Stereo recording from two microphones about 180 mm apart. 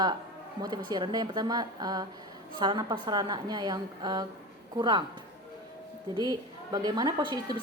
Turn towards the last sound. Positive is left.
turn(degrees=-25)  # may be behind; listen again after turning